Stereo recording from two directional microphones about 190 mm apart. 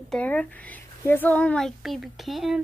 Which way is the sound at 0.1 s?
10° left (ahead or behind).